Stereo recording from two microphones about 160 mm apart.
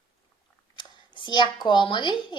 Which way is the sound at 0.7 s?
30° left (ahead or behind).